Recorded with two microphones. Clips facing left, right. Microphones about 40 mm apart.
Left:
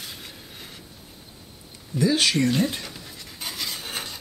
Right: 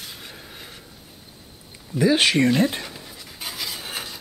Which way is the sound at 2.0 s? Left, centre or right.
Right.